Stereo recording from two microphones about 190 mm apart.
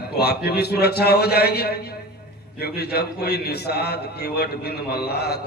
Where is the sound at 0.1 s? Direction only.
55° left (ahead or behind).